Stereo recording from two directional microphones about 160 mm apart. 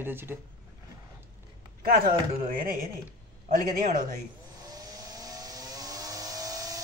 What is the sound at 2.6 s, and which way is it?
Speech, 65° right (ahead or behind).